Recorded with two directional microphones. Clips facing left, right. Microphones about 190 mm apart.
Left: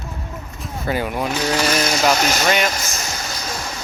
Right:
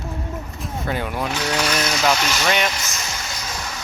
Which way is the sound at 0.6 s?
5° left (ahead or behind).